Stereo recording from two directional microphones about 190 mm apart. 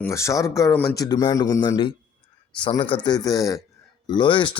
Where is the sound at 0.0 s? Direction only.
15° left (ahead or behind).